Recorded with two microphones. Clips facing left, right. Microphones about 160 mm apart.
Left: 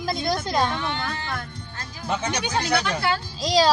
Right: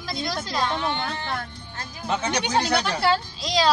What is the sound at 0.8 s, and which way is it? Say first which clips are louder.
Speech: right 1 dB; 25° right (ahead or behind).